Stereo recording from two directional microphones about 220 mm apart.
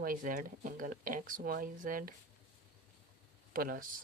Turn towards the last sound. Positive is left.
turn(degrees=-40)  # may be behind; listen again after turning